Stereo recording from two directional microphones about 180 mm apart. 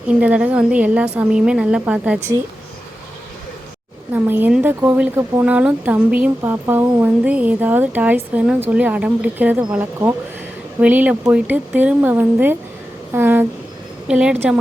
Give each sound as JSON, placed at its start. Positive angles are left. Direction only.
{"t": 0.1, "sound": "speech", "side_deg": -5}
{"t": 4.1, "sound": "speech", "side_deg": -10}